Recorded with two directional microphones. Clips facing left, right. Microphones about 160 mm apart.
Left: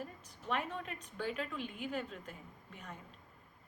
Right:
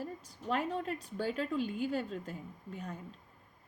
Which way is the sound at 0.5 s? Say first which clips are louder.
Right 5 dB; 35° right (ahead or behind).